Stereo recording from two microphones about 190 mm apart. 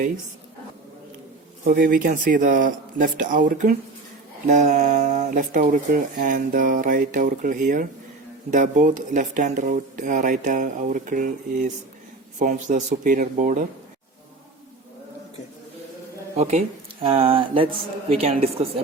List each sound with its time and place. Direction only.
1.6 s speech: 45° right (ahead or behind)
16.4 s speech: 35° right (ahead or behind)